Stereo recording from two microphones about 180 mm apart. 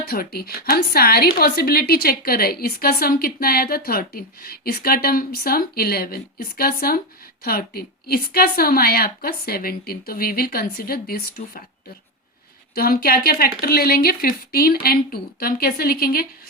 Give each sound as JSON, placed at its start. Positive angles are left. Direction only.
{"t": 0.0, "sound": "a woman's voice", "side_deg": 60}
{"t": 12.7, "sound": "a woman's voice", "side_deg": 60}